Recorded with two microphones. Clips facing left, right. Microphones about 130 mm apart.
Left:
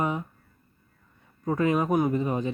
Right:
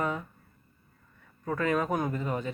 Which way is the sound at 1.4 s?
20° left (ahead or behind).